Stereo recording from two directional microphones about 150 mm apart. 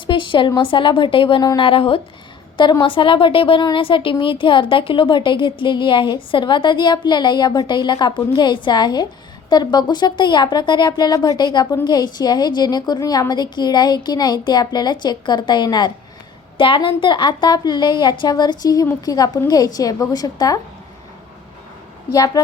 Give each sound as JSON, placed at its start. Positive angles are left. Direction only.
{"t": 0.1, "sound": "a woman's voice", "side_deg": 35}